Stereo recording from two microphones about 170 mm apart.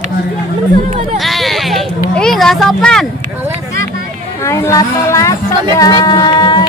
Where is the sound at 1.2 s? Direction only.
Centre (ahead or behind).